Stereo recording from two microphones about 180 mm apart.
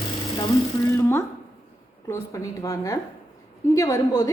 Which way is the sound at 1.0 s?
15° left (ahead or behind).